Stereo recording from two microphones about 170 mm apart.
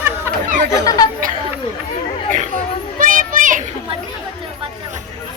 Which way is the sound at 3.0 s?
50° right (ahead or behind).